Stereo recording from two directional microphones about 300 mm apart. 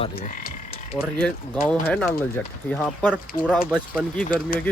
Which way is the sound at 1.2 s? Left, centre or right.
Centre.